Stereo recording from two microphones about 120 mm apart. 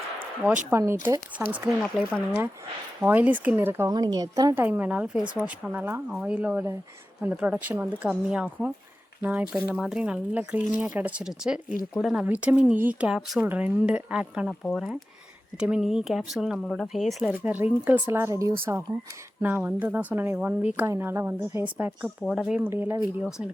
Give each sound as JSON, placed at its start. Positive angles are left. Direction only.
{"t": 0.4, "sound": "speech", "side_deg": -10}
{"t": 3.0, "sound": "speech", "side_deg": -15}
{"t": 3.8, "sound": "a woman's voice", "side_deg": -35}
{"t": 4.5, "sound": "speech", "side_deg": -15}
{"t": 12.2, "sound": "speech", "side_deg": -15}
{"t": 17.2, "sound": "speech", "side_deg": -15}